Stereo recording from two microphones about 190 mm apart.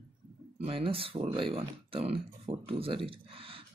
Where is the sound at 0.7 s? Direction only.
30° right (ahead or behind).